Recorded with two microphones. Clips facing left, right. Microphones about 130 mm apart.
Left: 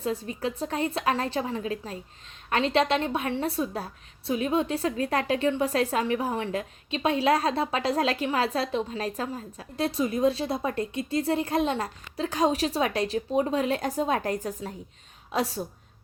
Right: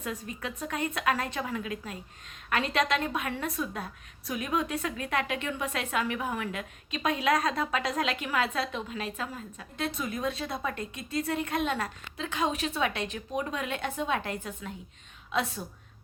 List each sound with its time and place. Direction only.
0.0 s a woman's voice: 30° left (ahead or behind)